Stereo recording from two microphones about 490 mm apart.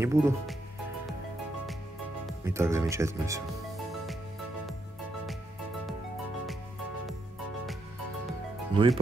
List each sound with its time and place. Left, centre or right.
0.0 s speech: centre
2.2 s speech: centre
8.7 s speech: centre